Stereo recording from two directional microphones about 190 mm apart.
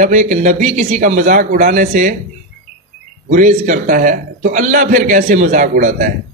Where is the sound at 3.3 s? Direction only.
45° right (ahead or behind).